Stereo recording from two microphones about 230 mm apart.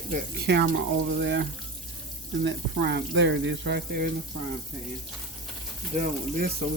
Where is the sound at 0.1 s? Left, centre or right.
Right.